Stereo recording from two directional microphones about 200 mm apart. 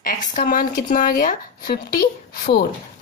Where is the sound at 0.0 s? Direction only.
45° left (ahead or behind).